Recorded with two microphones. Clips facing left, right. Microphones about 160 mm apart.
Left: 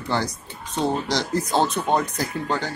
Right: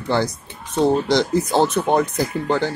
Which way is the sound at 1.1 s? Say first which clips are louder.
Right 5 dB; 20° right (ahead or behind).